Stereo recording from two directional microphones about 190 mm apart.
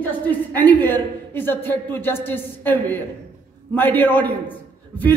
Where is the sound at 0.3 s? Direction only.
10° left (ahead or behind).